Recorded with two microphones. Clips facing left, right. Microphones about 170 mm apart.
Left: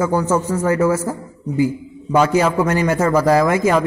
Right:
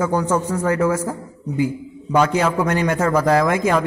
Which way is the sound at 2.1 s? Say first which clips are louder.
Left 2 dB; 5° left (ahead or behind).